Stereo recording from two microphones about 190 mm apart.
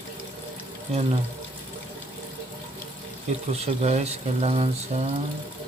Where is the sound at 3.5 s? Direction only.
35° right (ahead or behind).